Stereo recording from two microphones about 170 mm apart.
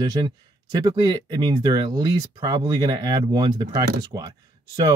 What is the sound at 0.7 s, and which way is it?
Speech, 25° right (ahead or behind).